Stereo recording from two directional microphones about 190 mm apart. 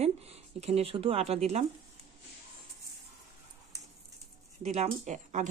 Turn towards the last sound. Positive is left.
turn(degrees=-40)  # may be behind; listen again after turning